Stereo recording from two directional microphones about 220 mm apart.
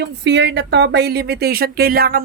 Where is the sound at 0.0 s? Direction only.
50° right (ahead or behind).